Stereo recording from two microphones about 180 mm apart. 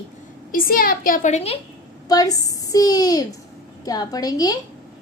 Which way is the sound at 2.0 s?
20° left (ahead or behind).